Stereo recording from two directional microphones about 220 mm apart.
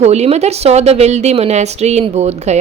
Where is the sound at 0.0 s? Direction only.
30° right (ahead or behind).